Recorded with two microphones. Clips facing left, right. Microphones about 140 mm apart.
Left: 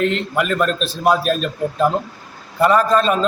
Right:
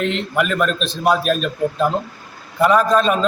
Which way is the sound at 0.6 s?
Centre (ahead or behind).